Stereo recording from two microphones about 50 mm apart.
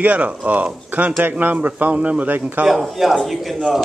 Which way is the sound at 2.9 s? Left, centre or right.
Centre.